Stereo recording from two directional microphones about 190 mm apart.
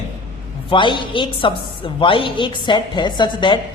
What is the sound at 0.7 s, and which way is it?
Speech, 25° left (ahead or behind).